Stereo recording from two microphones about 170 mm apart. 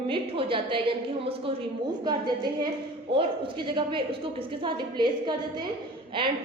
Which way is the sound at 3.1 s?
30° right (ahead or behind).